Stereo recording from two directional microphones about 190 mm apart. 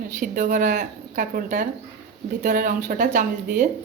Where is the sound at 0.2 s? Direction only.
45° right (ahead or behind).